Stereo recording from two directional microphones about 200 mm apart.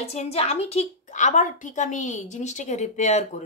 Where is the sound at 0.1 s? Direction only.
30° left (ahead or behind).